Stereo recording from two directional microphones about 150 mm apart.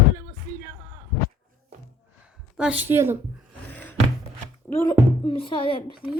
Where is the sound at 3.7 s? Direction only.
10° left (ahead or behind).